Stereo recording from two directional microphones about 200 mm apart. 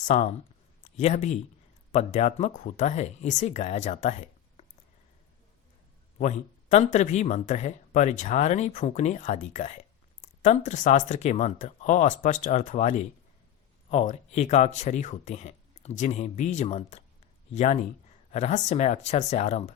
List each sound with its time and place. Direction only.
0.0 s speech: 35° left (ahead or behind)
6.1 s speech: 35° left (ahead or behind)